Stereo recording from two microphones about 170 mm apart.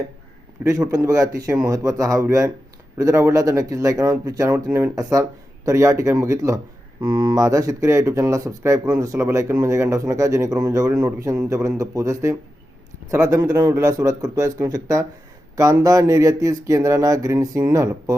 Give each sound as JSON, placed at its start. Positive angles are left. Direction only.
{"t": 0.9, "sound": "speech", "side_deg": -20}